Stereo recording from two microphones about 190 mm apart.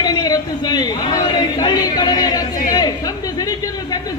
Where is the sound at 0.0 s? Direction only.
20° left (ahead or behind).